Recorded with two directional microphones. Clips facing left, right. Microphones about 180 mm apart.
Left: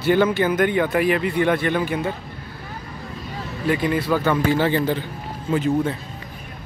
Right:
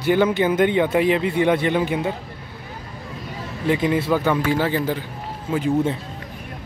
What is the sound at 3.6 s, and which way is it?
A man's voice, 20° right (ahead or behind).